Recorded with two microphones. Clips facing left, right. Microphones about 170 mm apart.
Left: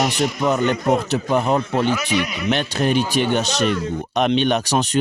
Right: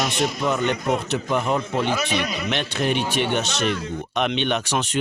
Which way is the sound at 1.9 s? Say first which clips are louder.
Left 2 dB; 35° right (ahead or behind).